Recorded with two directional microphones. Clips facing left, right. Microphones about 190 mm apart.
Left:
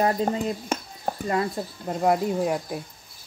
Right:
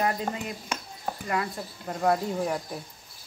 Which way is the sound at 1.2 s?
30° left (ahead or behind).